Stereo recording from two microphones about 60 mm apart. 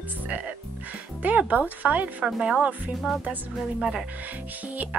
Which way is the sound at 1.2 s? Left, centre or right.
Right.